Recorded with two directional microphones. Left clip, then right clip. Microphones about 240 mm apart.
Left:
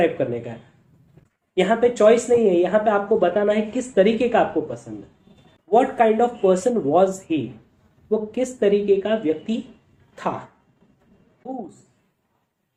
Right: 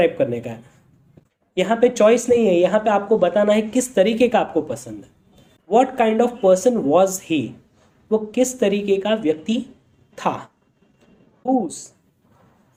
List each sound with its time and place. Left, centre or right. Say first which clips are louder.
0.0 s speech: right 3 dB; right
1.5 s speech: right 1 dB; right